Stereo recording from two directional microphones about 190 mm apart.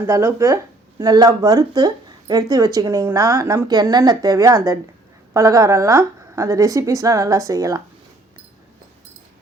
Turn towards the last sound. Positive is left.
turn(degrees=-20)  # may be behind; listen again after turning